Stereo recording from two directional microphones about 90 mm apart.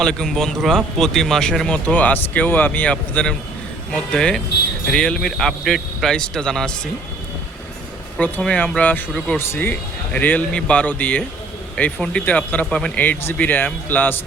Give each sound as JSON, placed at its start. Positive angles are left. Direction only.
{"t": 0.0, "sound": "speech", "side_deg": 5}
{"t": 8.4, "sound": "speech", "side_deg": 15}
{"t": 9.4, "sound": "speech", "side_deg": 25}